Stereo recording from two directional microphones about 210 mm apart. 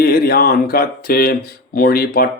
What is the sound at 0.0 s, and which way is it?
Speech, 45° left (ahead or behind).